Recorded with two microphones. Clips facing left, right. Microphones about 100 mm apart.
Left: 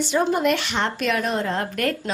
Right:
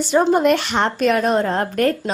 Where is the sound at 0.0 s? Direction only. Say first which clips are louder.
Right 5 dB; 40° right (ahead or behind).